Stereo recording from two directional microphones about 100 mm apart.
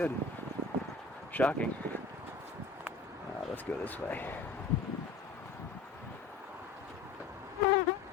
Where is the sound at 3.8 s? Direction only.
15° left (ahead or behind).